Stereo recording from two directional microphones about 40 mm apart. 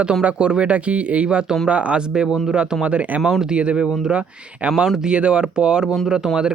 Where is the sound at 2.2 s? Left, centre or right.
Centre.